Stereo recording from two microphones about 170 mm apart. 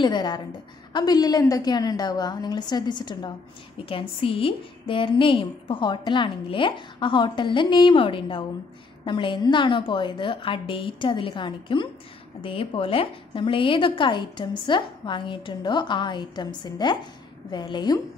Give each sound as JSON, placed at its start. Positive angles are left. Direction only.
{"t": 0.0, "sound": "a woman's voice", "side_deg": 25}